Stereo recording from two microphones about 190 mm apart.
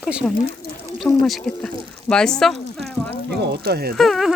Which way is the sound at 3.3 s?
60° right (ahead or behind).